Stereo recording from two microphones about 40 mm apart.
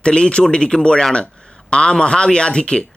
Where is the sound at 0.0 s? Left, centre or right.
Left.